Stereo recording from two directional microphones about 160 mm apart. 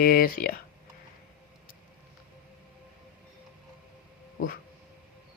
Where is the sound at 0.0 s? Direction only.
65° left (ahead or behind).